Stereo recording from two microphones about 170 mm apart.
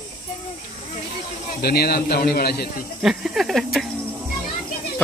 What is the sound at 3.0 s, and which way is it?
Speech, centre (ahead or behind).